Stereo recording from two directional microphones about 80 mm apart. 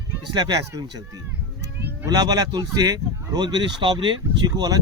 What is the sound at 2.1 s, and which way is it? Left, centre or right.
Speech, right.